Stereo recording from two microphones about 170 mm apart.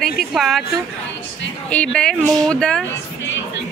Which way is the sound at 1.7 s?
5° left (ahead or behind).